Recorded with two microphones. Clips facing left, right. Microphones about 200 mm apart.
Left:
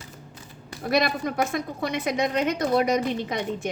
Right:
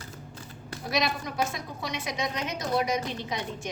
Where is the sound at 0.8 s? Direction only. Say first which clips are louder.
Left 6 dB; 55° left (ahead or behind).